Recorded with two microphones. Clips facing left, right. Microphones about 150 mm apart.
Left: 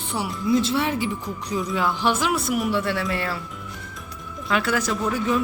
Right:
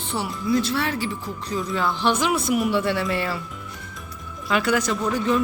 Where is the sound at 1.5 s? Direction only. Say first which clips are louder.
Left 1 dB; 5° left (ahead or behind).